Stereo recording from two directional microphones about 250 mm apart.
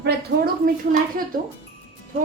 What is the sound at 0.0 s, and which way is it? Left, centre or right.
Speech, right.